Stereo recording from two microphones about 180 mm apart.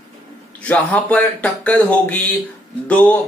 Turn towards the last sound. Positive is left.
turn(degrees=10)  # may be behind; listen again after turning